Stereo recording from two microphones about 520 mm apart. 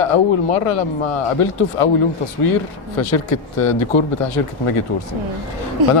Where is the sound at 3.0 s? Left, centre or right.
Left.